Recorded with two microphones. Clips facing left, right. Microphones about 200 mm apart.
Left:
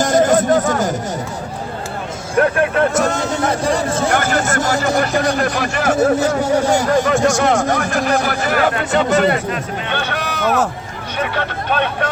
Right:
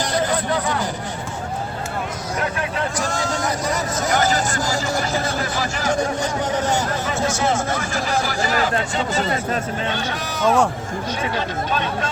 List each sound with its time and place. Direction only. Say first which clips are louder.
0.0 s a sound: left 8 dB; 45° left (ahead or behind)
2.3 s speech: left 11 dB; 55° left (ahead or behind)
3.5 s speech: left 6 dB; 30° left (ahead or behind)
4.1 s speech: left 3 dB; 55° left (ahead or behind)
6.1 s speech: left 7 dB; 10° left (ahead or behind)
6.9 s speech: left 9 dB; 80° left; by 12.0 s 65° left (ahead or behind)